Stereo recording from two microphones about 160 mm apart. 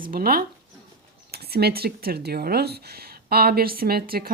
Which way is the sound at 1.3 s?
80° right.